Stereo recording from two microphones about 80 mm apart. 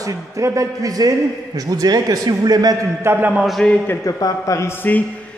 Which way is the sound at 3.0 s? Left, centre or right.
Right.